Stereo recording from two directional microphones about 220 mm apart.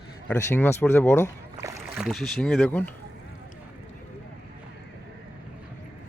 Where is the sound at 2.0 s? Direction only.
Centre (ahead or behind).